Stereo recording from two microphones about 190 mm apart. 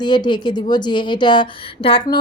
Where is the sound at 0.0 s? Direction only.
25° left (ahead or behind).